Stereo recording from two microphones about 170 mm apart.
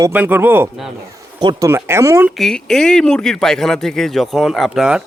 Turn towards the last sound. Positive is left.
turn(degrees=-5)  # may be behind; listen again after turning